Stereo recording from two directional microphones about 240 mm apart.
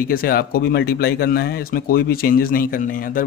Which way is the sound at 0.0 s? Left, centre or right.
Left.